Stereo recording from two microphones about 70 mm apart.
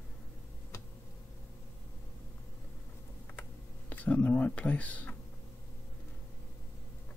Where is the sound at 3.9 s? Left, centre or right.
Left.